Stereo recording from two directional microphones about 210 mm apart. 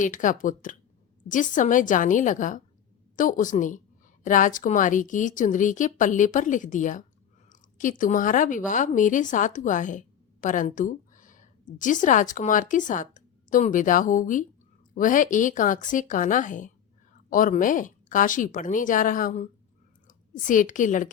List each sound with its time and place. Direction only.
0.0 s a woman's voice: 40° left (ahead or behind)